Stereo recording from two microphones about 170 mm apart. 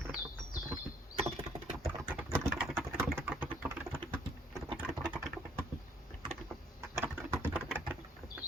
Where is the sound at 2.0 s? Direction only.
10° right (ahead or behind).